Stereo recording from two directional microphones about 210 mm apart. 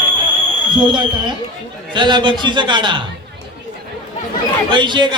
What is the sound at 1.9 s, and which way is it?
Speech, 20° right (ahead or behind).